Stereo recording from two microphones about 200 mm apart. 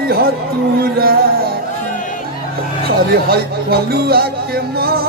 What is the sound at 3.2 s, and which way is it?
Speech, 50° right (ahead or behind).